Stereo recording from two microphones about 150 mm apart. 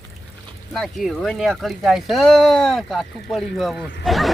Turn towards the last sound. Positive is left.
turn(degrees=0)  # may be behind; listen again after turning